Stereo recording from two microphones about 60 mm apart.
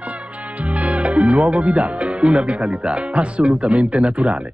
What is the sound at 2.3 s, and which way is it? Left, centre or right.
Speech, centre.